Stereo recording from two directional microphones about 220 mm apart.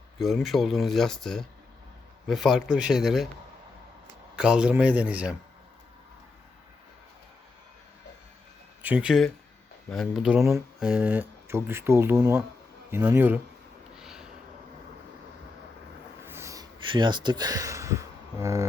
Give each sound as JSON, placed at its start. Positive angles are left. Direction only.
{"t": 0.2, "sound": "speech", "side_deg": 0}
{"t": 4.4, "sound": "speech", "side_deg": -5}
{"t": 8.8, "sound": "speech", "side_deg": -5}
{"t": 13.9, "sound": "snort", "side_deg": -5}
{"t": 16.2, "sound": "a sound", "side_deg": -10}